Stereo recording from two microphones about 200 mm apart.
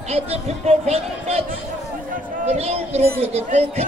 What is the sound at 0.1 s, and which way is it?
Speech, 30° right (ahead or behind).